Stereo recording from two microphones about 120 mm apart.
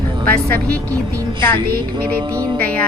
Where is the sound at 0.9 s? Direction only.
30° right (ahead or behind).